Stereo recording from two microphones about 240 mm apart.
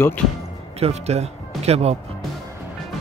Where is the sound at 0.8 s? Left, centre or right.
Right.